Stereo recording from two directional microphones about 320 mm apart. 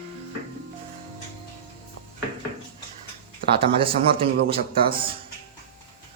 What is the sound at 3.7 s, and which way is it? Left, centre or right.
Speech, centre.